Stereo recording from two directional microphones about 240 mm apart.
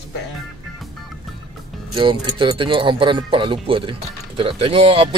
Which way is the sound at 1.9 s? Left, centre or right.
Centre.